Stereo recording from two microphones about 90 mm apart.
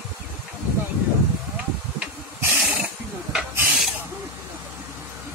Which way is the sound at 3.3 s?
5° right (ahead or behind).